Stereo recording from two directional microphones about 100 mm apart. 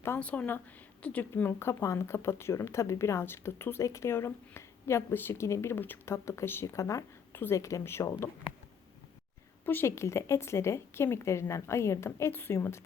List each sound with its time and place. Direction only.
0.2 s a woman's voice: 15° left (ahead or behind)
9.6 s speech: 25° left (ahead or behind)